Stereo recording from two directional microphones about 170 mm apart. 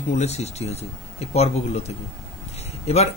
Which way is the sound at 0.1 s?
40° left (ahead or behind).